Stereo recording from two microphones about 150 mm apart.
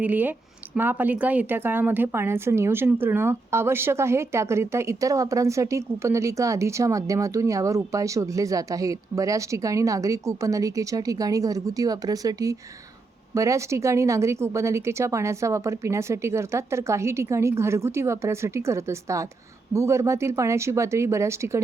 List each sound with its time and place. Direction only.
0.0 s a woman's voice: 10° right (ahead or behind)